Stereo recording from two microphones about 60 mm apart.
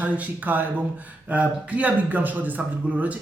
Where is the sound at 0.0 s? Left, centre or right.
Right.